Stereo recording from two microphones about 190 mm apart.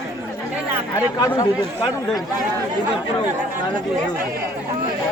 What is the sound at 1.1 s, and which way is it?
Speech, 25° left (ahead or behind).